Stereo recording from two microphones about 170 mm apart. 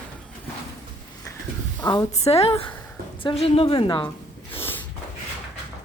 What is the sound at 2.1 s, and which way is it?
A woman's voice, 35° left (ahead or behind).